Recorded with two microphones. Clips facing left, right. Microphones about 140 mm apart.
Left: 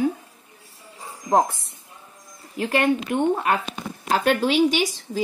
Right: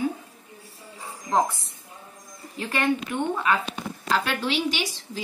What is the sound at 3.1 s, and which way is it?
A woman's voice, 45° left (ahead or behind).